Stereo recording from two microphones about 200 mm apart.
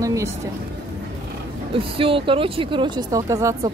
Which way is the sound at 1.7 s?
25° right (ahead or behind).